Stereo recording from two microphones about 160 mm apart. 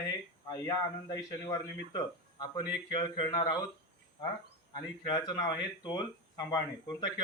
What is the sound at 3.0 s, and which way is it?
Speech, 25° left (ahead or behind).